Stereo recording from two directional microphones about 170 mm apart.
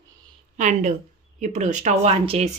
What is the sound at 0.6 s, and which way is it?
A woman's voice, 45° right (ahead or behind).